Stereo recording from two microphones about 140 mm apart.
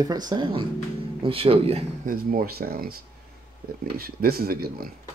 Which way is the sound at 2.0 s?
90° right.